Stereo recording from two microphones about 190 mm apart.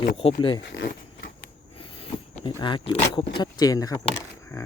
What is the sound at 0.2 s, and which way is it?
Speech, 30° left (ahead or behind).